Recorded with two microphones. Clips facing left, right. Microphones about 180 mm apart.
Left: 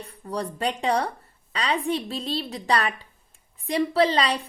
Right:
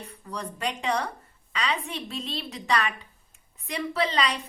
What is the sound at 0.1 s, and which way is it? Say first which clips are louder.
A woman's voice: left 9 dB; 35° left (ahead or behind).